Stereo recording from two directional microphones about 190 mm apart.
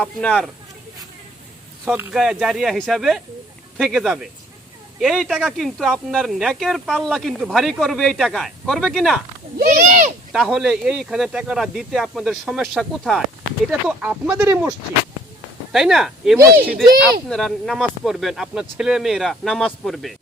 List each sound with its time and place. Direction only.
0.0 s speech: 5° left (ahead or behind)
1.8 s speech: 5° right (ahead or behind)
9.8 s speech: 40° right (ahead or behind)
10.3 s speech: centre (ahead or behind)
15.7 s speech: centre (ahead or behind)